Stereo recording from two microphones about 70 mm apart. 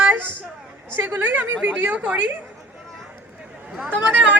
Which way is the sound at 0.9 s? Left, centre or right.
Right.